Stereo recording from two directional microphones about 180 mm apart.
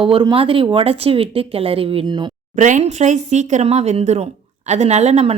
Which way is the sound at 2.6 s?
40° right (ahead or behind).